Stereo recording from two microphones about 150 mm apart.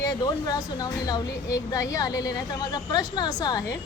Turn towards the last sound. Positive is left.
turn(degrees=25)  # may be behind; listen again after turning